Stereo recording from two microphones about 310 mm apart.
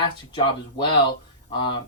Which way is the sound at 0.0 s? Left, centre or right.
Centre.